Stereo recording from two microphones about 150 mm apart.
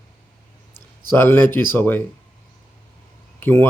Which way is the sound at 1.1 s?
15° left (ahead or behind).